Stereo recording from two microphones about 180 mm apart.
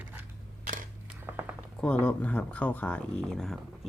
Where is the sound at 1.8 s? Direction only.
5° left (ahead or behind).